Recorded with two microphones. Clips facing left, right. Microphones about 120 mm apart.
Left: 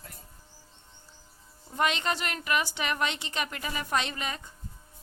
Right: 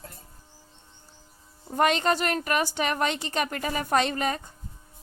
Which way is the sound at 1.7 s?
45° right (ahead or behind).